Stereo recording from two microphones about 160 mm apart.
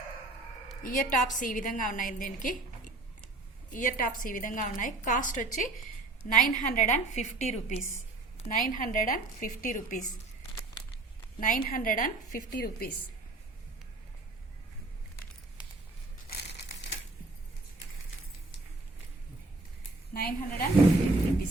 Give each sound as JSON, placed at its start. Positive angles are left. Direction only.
{"t": 0.8, "sound": "a woman's voice", "side_deg": 60}
{"t": 8.4, "sound": "a woman's voice", "side_deg": 60}
{"t": 11.3, "sound": "a woman's voice", "side_deg": 60}
{"t": 16.5, "sound": "crumpling", "side_deg": 90}
{"t": 20.1, "sound": "a woman's voice", "side_deg": 70}